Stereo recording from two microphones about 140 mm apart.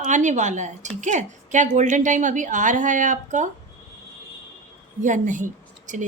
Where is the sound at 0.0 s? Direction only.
60° right (ahead or behind).